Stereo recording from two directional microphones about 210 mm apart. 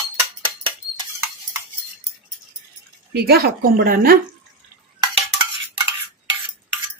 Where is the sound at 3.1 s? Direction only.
50° right (ahead or behind).